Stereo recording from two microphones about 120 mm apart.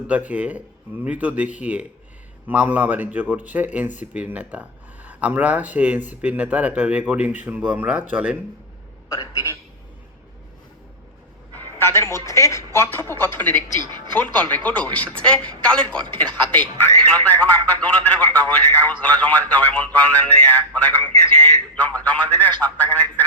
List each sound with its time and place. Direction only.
0.1 s speech: 15° right (ahead or behind)
9.1 s a woman's voice: 25° left (ahead or behind)
11.5 s a woman's voice: 20° left (ahead or behind)